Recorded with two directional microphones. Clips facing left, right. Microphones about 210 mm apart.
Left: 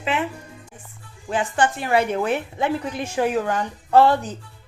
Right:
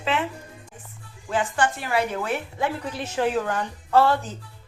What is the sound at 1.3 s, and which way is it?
A woman's voice, 20° left (ahead or behind).